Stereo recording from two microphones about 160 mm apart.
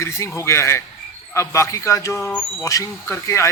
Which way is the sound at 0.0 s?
15° left (ahead or behind).